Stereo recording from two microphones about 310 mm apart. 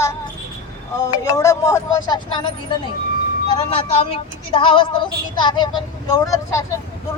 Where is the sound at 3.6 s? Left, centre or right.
Centre.